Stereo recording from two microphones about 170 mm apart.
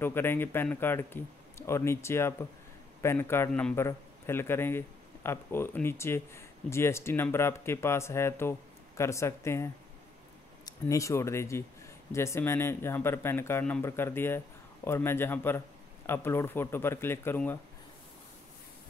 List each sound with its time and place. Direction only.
0.0 s a man's voice: 15° left (ahead or behind)